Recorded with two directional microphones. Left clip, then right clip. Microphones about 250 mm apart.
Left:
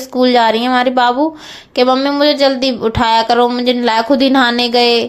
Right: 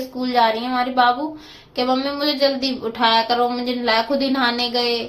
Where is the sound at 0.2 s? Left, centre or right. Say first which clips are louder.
Left 7 dB; left.